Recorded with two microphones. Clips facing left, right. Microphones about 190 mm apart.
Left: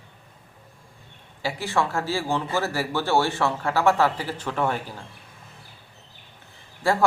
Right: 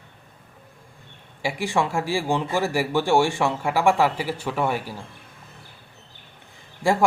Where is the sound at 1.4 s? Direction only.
15° right (ahead or behind).